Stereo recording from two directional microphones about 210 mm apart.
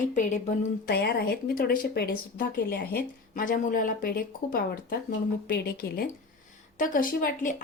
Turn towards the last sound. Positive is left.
turn(degrees=40)  # may be behind; listen again after turning